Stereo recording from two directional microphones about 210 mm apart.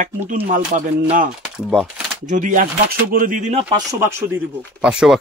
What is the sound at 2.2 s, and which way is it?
Speech, 35° right (ahead or behind).